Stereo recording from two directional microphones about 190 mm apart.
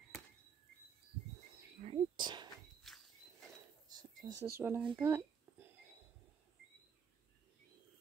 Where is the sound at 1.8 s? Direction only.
30° right (ahead or behind).